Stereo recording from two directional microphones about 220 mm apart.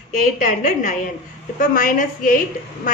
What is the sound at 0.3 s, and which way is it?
A woman's voice, 35° left (ahead or behind).